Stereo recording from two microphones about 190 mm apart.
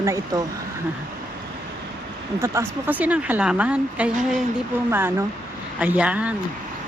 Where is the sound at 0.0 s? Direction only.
15° right (ahead or behind).